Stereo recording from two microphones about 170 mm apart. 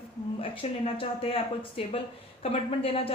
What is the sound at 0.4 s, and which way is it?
A woman's voice, 35° left (ahead or behind).